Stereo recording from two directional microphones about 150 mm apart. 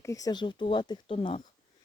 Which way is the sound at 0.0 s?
25° left (ahead or behind).